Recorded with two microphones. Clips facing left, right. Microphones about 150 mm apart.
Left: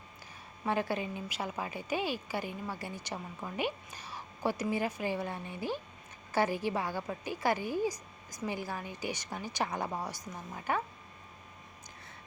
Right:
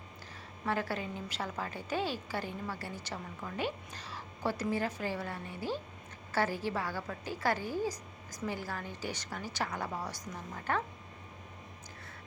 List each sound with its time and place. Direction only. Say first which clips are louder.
0.6 s a woman's voice: left 2 dB; 20° left (ahead or behind)